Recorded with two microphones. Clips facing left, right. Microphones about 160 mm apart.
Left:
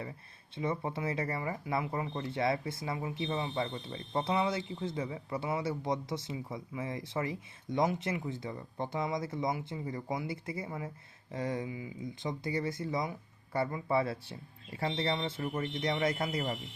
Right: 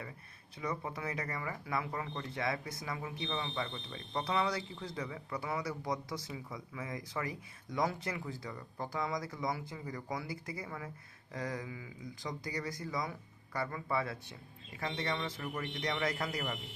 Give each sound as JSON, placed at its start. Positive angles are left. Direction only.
{"t": 0.5, "sound": "speech", "side_deg": 25}